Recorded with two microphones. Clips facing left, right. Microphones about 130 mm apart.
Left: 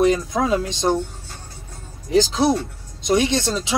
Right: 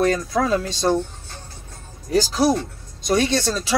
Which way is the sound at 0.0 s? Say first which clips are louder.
Left 2 dB; 20° left (ahead or behind).